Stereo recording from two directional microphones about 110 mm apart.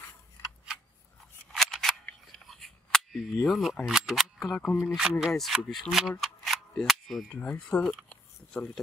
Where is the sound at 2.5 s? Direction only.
Centre (ahead or behind).